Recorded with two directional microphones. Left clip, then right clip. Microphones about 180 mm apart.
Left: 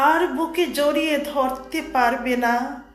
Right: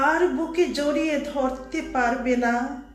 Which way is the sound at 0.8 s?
10° right (ahead or behind).